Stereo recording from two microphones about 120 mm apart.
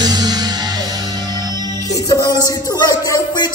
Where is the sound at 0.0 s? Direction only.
35° right (ahead or behind).